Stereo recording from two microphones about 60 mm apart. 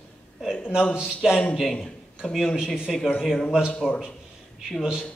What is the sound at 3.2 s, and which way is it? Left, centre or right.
Speech, centre.